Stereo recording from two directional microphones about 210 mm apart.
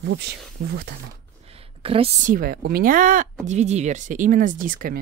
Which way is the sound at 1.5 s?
25° right (ahead or behind).